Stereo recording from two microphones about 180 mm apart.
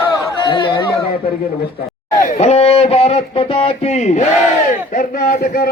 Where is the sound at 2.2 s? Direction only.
35° left (ahead or behind).